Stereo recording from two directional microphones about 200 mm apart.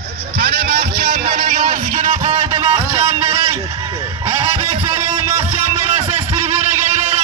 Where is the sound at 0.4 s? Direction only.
50° right (ahead or behind); by 3.3 s 25° right (ahead or behind).